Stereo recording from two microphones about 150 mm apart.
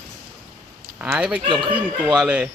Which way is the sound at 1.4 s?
30° right (ahead or behind).